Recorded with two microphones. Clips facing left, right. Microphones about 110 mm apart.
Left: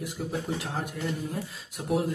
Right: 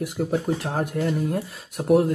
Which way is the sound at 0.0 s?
55° right (ahead or behind).